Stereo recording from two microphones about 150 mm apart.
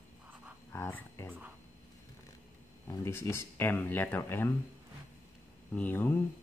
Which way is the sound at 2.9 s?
20° left (ahead or behind).